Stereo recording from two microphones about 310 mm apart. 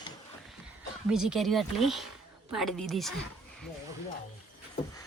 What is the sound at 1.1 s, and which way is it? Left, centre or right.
Speech, centre.